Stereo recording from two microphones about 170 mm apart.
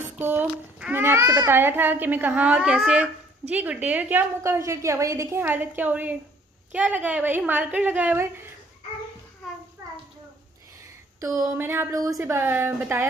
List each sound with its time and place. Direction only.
0.0 s a child's voice: 10° right (ahead or behind)
11.1 s a child's voice: 20° right (ahead or behind)